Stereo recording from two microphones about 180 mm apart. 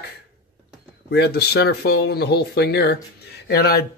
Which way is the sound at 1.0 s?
65° left (ahead or behind).